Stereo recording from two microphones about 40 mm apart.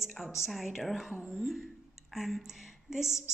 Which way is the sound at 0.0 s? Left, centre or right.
Centre.